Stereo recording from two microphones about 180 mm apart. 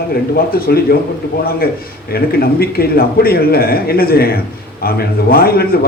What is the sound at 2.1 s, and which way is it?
A man's voice, 55° left (ahead or behind).